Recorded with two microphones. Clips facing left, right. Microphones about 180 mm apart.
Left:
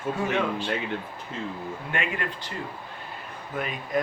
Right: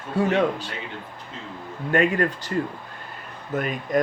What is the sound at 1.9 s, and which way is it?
Speech, 40° right (ahead or behind).